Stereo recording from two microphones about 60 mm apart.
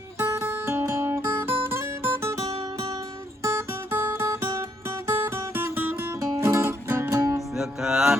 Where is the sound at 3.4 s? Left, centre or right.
Right.